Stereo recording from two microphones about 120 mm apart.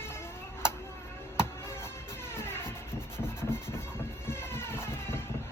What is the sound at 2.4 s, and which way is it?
Music, 20° left (ahead or behind).